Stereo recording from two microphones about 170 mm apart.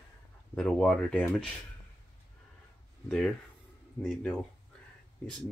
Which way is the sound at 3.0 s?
5° left (ahead or behind).